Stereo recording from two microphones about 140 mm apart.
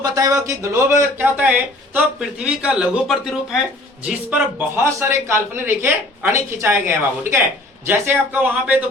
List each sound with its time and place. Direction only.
0.0 s a man's voice: 25° right (ahead or behind)